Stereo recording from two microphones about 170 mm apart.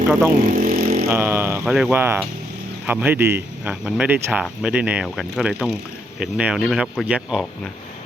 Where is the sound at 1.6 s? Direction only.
5° right (ahead or behind).